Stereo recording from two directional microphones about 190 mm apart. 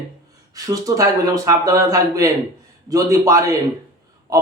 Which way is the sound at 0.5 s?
20° right (ahead or behind).